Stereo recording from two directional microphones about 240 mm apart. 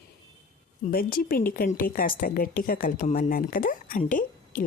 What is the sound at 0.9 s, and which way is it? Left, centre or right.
A woman's voice, left.